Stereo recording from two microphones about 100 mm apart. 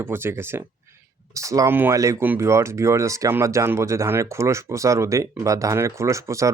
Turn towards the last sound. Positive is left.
turn(degrees=-30)  # may be behind; listen again after turning